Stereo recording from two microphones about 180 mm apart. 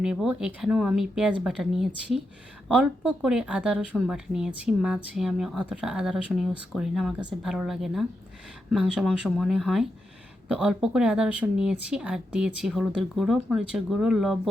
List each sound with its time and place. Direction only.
0.0 s speech: 5° right (ahead or behind)